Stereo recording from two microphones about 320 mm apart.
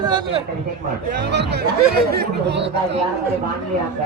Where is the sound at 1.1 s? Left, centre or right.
Right.